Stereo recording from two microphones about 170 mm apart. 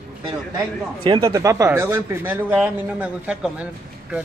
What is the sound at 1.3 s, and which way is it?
Speech, 20° right (ahead or behind).